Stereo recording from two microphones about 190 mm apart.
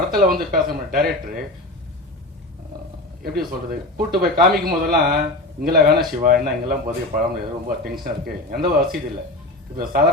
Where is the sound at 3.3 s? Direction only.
50° right (ahead or behind).